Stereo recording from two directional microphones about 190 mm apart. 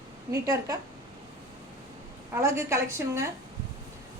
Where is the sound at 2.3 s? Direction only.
15° right (ahead or behind).